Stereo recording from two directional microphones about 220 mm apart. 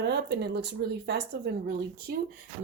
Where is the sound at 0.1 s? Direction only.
50° right (ahead or behind).